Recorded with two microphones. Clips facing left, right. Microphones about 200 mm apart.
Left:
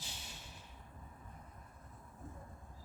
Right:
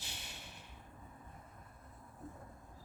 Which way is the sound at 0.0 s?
65° right (ahead or behind).